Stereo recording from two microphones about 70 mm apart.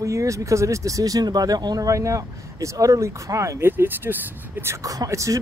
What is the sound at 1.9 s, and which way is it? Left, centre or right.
Speech, right.